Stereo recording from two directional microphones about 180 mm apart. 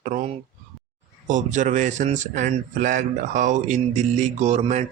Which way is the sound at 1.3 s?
45° right (ahead or behind).